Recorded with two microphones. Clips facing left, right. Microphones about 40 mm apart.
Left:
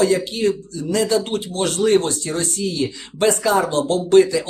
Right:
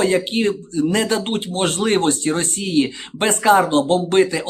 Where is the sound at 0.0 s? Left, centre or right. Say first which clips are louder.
Even; right.